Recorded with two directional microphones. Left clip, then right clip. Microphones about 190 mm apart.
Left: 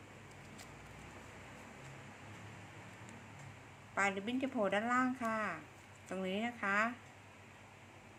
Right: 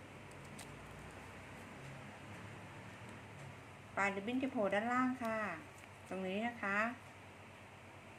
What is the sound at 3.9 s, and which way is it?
A woman's voice, 15° left (ahead or behind).